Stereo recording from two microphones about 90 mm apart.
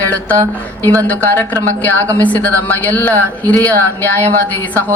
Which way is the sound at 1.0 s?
25° left (ahead or behind).